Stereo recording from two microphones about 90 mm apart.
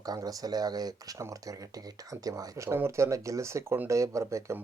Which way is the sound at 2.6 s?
30° right (ahead or behind).